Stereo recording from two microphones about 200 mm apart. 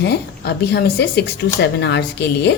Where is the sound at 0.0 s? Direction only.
55° left (ahead or behind).